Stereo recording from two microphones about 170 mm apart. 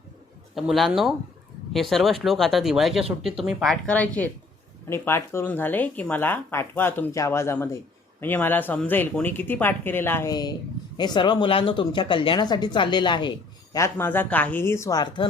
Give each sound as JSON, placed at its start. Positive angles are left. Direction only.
{"t": 0.5, "sound": "speech", "side_deg": 0}
{"t": 13.7, "sound": "speech", "side_deg": 15}